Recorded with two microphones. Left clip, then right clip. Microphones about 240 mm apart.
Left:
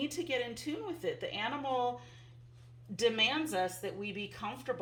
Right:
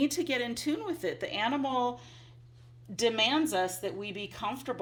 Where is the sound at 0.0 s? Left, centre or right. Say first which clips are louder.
Right 5 dB; right.